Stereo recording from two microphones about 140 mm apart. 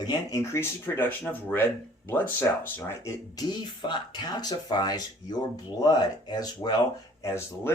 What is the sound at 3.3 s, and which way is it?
Speech, 30° left (ahead or behind).